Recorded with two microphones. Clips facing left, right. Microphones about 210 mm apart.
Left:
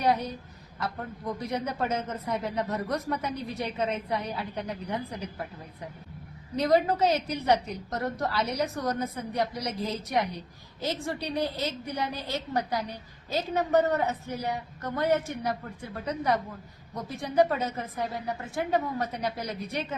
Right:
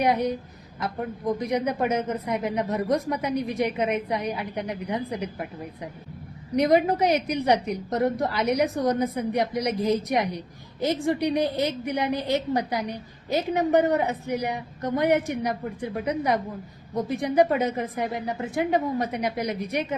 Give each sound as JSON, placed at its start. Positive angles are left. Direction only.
{"t": 0.8, "sound": "a woman's voice", "side_deg": -15}